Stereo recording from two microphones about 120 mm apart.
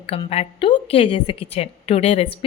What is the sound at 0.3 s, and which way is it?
A woman's voice, 55° left (ahead or behind).